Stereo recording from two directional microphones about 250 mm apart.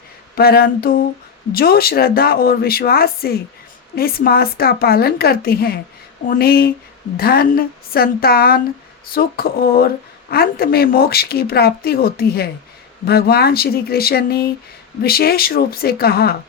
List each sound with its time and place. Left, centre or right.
0.3 s speech: left